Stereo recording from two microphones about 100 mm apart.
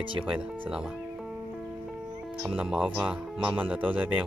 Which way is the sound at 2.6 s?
10° right (ahead or behind).